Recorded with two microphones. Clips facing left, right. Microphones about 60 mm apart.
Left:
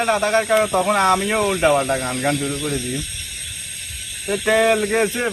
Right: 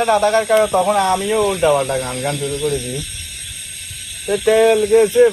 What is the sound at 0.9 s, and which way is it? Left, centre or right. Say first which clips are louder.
Speech: right 1 dB; left.